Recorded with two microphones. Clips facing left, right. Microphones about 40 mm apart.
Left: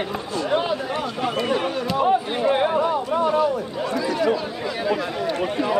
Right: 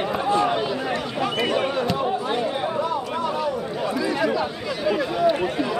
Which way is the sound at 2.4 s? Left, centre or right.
Left.